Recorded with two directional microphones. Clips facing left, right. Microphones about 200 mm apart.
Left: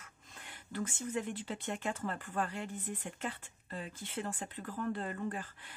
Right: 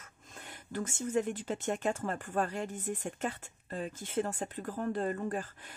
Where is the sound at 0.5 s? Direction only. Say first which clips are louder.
Right 2 dB; 40° right (ahead or behind).